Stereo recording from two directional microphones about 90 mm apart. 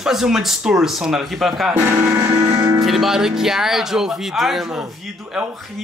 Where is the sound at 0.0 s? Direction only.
5° right (ahead or behind).